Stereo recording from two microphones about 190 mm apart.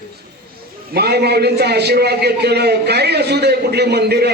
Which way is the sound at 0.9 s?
55° right (ahead or behind).